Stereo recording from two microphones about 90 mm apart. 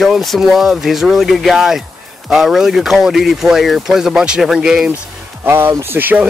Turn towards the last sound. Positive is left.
turn(degrees=-20)  # may be behind; listen again after turning